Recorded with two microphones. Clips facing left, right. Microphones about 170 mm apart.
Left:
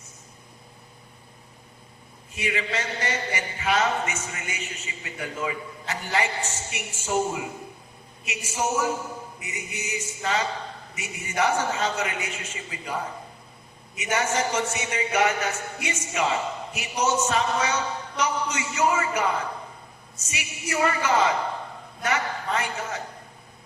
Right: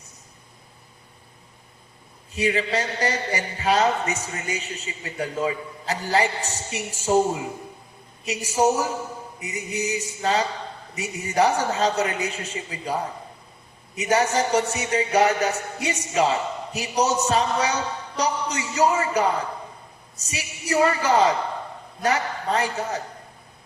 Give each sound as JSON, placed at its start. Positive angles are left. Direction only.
{"t": 2.3, "sound": "a man's voice", "side_deg": -35}